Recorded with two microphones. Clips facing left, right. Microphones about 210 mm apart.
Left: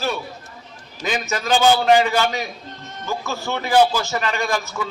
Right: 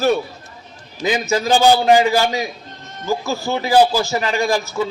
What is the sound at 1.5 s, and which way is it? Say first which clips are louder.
Speech: right 2 dB; 40° right (ahead or behind).